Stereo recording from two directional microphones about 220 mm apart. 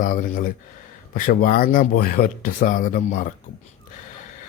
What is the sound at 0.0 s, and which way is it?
Speech, 35° left (ahead or behind).